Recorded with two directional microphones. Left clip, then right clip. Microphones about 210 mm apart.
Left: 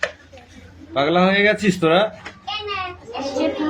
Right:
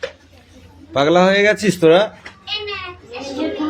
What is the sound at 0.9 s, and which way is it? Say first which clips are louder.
Speech: right 4 dB; 30° right (ahead or behind).